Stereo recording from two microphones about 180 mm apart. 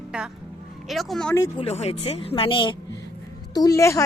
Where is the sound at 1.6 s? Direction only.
35° left (ahead or behind); by 4.0 s 15° left (ahead or behind).